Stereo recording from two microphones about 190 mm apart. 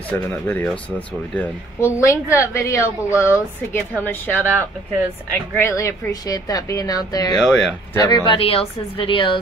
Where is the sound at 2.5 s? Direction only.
15° left (ahead or behind).